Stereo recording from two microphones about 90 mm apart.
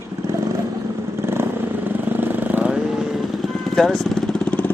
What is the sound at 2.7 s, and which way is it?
Vehicle, 5° right (ahead or behind).